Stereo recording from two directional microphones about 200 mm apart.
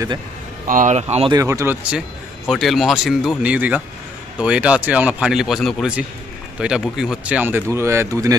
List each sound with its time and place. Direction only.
0.7 s speech: 40° right (ahead or behind)
1.3 s a man's voice: 15° right (ahead or behind)